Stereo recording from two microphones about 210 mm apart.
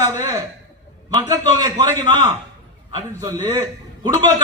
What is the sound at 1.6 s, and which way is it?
A man's voice, 15° right (ahead or behind).